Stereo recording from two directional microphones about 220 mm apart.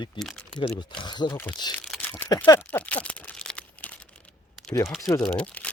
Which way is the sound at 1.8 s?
5° left (ahead or behind).